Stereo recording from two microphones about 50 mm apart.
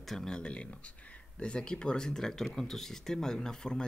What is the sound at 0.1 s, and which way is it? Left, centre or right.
Speech, centre.